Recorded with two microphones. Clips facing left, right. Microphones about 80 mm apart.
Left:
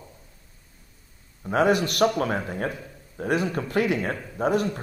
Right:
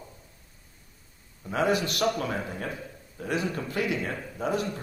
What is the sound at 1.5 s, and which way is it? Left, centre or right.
Speech, left.